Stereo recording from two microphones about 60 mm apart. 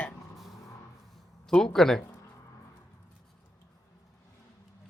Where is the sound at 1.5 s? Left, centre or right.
Centre.